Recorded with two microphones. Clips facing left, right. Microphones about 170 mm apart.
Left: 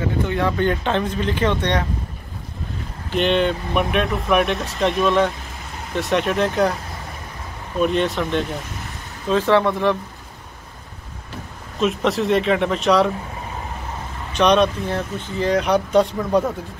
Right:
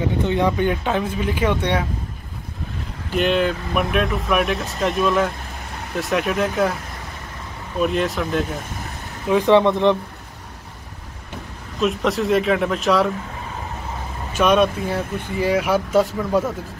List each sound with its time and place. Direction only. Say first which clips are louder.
0.3 s speech: right 1 dB; 15° right (ahead or behind)
3.2 s speech: left 1 dB; 5° right (ahead or behind)
7.8 s speech: left 1 dB; centre (ahead or behind)
9.3 s speech: right 2 dB; 15° right (ahead or behind)
11.8 s speech: even; centre (ahead or behind)
14.3 s speech: even; 5° right (ahead or behind)